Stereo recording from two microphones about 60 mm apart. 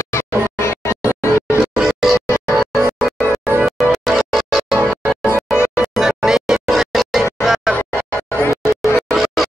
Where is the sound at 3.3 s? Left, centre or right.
Right.